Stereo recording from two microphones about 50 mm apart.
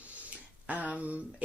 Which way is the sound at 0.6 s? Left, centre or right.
Right.